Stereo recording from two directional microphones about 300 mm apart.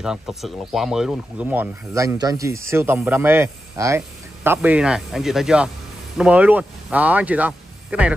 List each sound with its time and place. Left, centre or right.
0.0 s speech: centre